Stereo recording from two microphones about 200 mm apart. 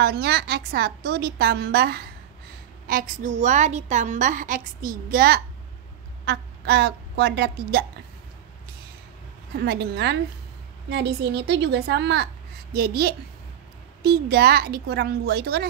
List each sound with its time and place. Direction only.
0.0 s a woman's voice: 50° right (ahead or behind)
9.6 s a woman's voice: 55° right (ahead or behind)
12.7 s a woman's voice: 50° right (ahead or behind)